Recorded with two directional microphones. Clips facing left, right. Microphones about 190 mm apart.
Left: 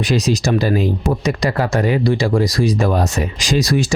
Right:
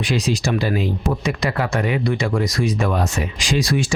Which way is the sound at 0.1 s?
40° left (ahead or behind).